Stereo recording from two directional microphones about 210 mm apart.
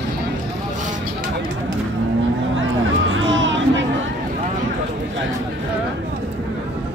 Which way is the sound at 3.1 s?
65° right (ahead or behind).